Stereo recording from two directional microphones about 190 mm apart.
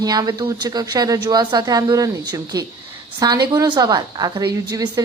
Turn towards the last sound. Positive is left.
turn(degrees=-20)  # may be behind; listen again after turning